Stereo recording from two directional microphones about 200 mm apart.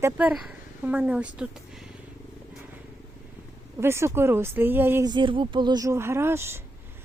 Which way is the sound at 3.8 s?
15° right (ahead or behind).